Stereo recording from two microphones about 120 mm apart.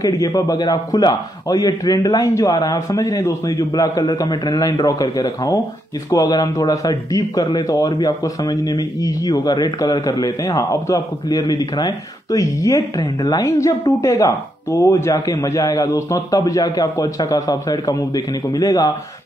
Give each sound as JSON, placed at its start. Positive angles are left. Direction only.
{"t": 0.0, "sound": "speech", "side_deg": 30}